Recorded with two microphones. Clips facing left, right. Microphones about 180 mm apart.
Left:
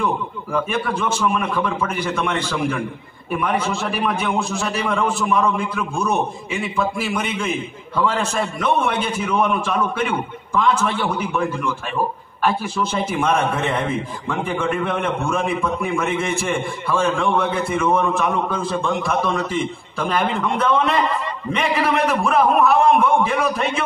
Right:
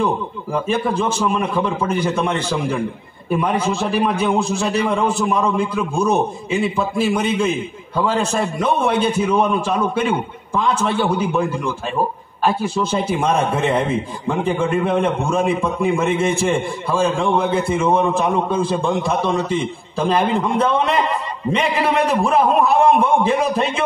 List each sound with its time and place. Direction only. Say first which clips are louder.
0.0 s a man's voice: right 3 dB; 30° right (ahead or behind)
22.1 s a man's voice: right 1 dB; 30° right (ahead or behind)